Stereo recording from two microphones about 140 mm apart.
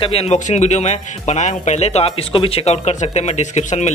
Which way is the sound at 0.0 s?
45° left (ahead or behind).